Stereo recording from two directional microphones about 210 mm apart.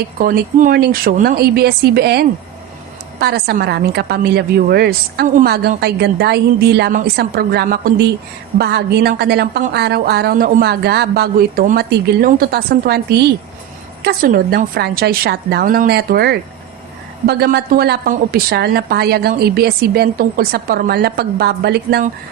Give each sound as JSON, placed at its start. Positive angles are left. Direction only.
{"t": 0.2, "sound": "a woman's voice", "side_deg": -45}